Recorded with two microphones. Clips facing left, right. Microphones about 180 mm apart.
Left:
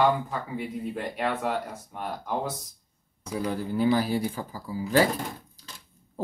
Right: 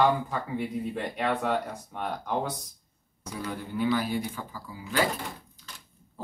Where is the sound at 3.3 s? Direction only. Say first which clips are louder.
Left 5 dB; 35° left (ahead or behind).